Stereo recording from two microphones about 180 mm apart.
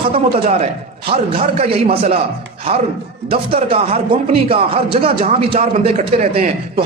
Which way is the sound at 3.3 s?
30° right (ahead or behind).